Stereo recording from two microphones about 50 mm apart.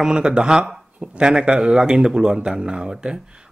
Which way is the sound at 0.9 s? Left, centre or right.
Right.